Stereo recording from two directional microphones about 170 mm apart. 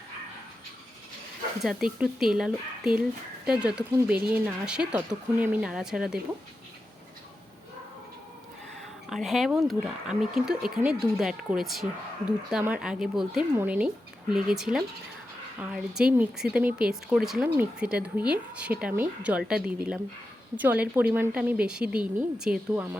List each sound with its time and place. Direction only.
1.6 s speech: 5° right (ahead or behind)
9.0 s a woman's voice: centre (ahead or behind)